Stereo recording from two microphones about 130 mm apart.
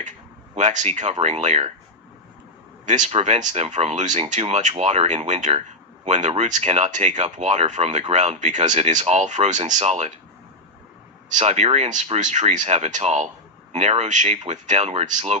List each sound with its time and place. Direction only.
0.5 s speech: 70° right (ahead or behind)
2.8 s a man's voice: 70° right (ahead or behind)
3.1 s speech: 60° right (ahead or behind)
11.3 s speech: 65° right (ahead or behind)